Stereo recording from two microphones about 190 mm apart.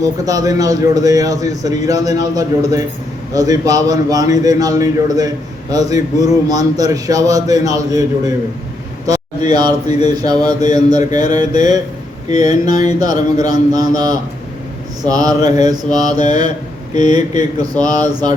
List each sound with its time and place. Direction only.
0.0 s speech: 20° right (ahead or behind)